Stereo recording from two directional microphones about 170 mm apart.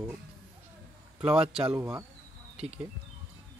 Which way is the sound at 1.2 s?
5° right (ahead or behind).